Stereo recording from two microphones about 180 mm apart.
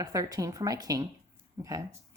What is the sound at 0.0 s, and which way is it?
A woman's voice, 20° right (ahead or behind).